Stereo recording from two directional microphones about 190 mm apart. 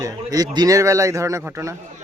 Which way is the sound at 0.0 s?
20° right (ahead or behind).